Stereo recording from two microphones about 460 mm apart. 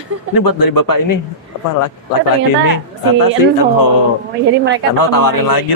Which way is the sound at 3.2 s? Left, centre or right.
Left.